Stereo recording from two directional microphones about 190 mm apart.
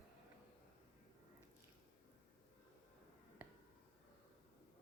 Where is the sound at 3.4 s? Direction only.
10° right (ahead or behind).